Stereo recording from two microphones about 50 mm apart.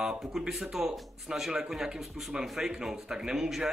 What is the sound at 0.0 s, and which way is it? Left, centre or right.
Speech, centre.